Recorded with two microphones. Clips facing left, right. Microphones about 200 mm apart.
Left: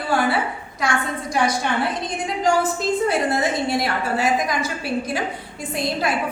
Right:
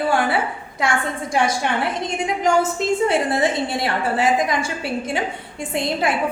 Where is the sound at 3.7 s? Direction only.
25° right (ahead or behind).